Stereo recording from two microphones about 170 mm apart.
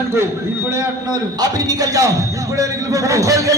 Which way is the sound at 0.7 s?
20° right (ahead or behind).